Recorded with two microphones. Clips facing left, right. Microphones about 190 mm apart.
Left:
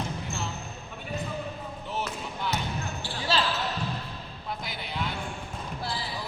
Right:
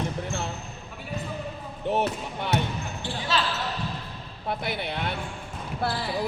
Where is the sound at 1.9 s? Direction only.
60° right (ahead or behind).